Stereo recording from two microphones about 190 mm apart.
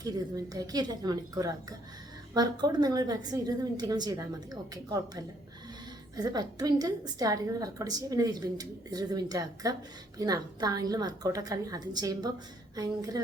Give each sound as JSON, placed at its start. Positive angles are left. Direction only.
{"t": 0.0, "sound": "a woman's voice", "side_deg": -20}